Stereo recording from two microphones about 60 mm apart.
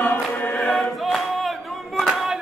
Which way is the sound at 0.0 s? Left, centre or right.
Left.